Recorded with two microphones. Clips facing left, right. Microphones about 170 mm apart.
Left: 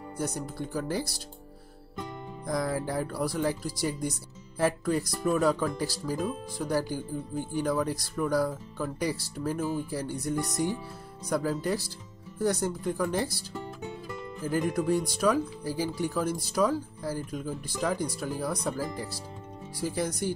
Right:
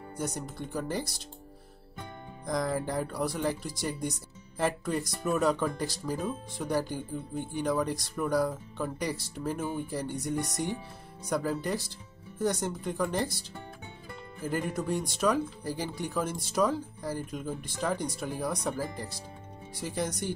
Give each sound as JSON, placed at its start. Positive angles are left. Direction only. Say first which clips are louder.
{"t": 0.2, "sound": "speech", "louder": "left 2 dB", "side_deg": 0}
{"t": 2.4, "sound": "speech", "louder": "left 1 dB", "side_deg": 5}
{"t": 14.5, "sound": "speech", "louder": "left 5 dB", "side_deg": 0}
{"t": 18.7, "sound": "speech", "louder": "left 1 dB", "side_deg": -20}
{"t": 19.8, "sound": "speech", "louder": "left 3 dB", "side_deg": 0}